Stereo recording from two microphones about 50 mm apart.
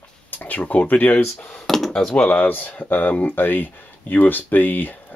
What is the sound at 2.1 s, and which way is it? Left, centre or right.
Speech, left.